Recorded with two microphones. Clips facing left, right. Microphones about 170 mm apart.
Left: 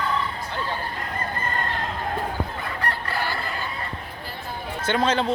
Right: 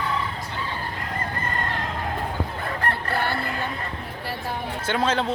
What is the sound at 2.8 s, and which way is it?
Fowl, 55° right (ahead or behind).